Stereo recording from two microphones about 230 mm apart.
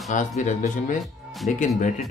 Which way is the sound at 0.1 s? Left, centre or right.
Left.